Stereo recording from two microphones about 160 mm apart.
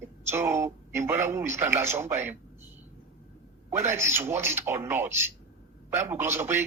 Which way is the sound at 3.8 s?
15° right (ahead or behind).